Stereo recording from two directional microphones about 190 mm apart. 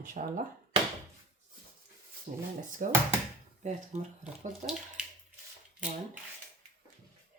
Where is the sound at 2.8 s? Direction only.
45° right (ahead or behind).